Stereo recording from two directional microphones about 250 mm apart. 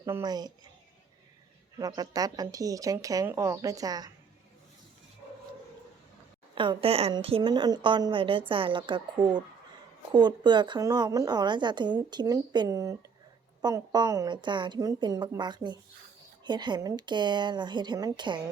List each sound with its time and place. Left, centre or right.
0.0 s a woman's voice: centre
1.8 s a woman's voice: centre
6.5 s a woman's voice: centre